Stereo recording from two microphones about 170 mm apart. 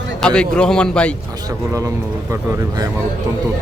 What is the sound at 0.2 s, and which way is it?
Speech, 5° left (ahead or behind).